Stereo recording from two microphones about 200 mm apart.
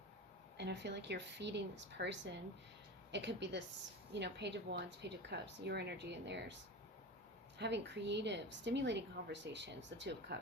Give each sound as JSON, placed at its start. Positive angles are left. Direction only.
{"t": 0.5, "sound": "a woman's voice", "side_deg": -60}
{"t": 7.6, "sound": "a woman's voice", "side_deg": -60}